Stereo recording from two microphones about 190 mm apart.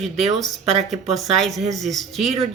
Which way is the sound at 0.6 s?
35° right (ahead or behind).